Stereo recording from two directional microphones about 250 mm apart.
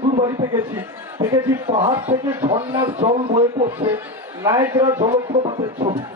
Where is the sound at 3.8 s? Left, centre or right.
Centre.